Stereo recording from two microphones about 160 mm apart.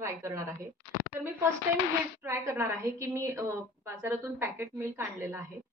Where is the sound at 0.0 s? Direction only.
20° right (ahead or behind).